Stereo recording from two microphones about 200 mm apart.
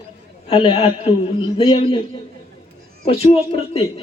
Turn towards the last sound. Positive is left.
turn(degrees=30)  # may be behind; listen again after turning